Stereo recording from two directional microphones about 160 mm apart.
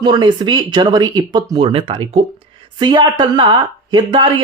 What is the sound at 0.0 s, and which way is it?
Speech, 25° right (ahead or behind).